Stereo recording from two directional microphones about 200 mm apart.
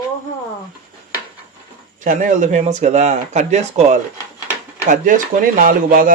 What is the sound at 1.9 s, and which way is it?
A man's voice, 40° right (ahead or behind).